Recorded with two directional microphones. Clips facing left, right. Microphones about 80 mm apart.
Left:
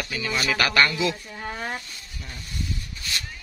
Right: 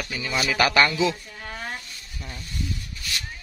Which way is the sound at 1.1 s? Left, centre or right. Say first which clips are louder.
Left 3 dB; centre.